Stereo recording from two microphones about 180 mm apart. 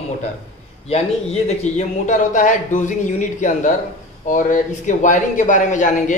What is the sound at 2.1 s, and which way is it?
A man's voice, 45° left (ahead or behind).